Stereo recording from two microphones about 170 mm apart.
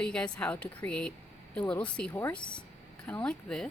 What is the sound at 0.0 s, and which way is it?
Speech, 5° left (ahead or behind).